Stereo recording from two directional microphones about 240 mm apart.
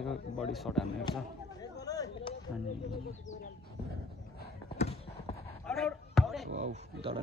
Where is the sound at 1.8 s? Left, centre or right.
Centre.